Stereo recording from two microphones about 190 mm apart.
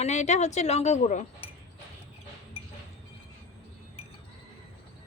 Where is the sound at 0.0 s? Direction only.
35° left (ahead or behind).